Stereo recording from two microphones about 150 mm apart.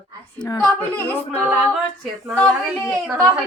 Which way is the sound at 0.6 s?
10° left (ahead or behind).